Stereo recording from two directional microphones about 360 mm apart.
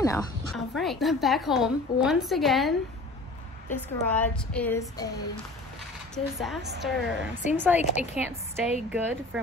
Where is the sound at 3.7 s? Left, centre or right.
Centre.